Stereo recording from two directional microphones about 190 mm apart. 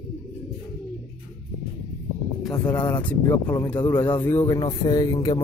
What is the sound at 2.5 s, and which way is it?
Speech, 10° left (ahead or behind).